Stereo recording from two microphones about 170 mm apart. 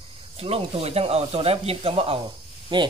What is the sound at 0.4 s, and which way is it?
Speech, 35° right (ahead or behind).